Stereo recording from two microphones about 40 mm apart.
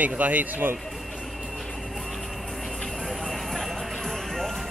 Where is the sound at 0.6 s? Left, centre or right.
Right.